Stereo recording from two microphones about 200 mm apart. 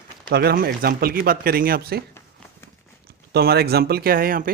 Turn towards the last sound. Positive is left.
turn(degrees=-45)  # may be behind; listen again after turning